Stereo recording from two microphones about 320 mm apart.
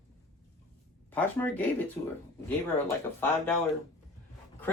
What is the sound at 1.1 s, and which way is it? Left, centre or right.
Speech, centre.